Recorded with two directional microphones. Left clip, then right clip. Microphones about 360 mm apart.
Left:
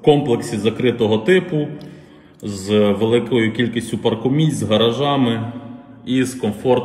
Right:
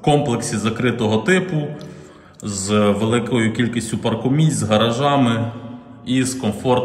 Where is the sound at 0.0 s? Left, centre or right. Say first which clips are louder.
Left 3 dB; right.